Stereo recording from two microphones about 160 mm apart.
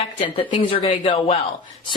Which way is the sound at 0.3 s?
35° left (ahead or behind).